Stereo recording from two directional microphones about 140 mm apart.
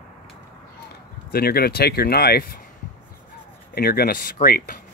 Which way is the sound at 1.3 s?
90° left.